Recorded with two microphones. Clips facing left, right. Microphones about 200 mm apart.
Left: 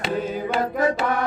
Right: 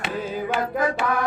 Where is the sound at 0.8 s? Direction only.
25° left (ahead or behind).